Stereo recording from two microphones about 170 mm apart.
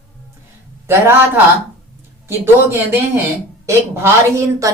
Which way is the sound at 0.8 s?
15° right (ahead or behind).